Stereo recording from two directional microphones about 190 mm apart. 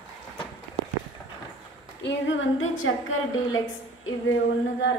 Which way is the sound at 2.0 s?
75° left (ahead or behind).